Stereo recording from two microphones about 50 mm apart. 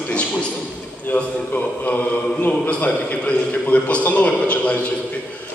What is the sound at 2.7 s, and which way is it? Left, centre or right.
A man's voice, left.